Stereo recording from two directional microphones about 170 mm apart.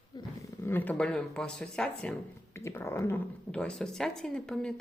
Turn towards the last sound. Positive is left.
turn(degrees=5)  # may be behind; listen again after turning